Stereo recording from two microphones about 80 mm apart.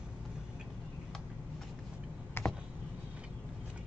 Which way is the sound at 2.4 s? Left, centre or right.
Left.